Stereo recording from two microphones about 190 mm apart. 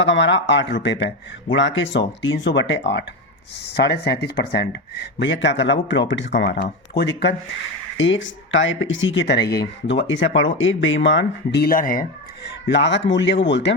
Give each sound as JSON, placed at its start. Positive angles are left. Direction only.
{"t": 0.0, "sound": "speech", "side_deg": 75}
{"t": 1.5, "sound": "speech", "side_deg": 75}
{"t": 7.9, "sound": "speech", "side_deg": 85}
{"t": 12.6, "sound": "speech", "side_deg": 70}